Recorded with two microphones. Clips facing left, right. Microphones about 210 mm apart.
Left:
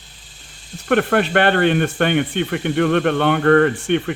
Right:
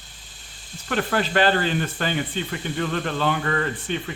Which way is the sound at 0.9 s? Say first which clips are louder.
Left 7 dB; 60° left (ahead or behind).